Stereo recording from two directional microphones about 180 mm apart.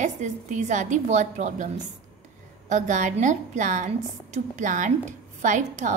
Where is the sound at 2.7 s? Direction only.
40° right (ahead or behind).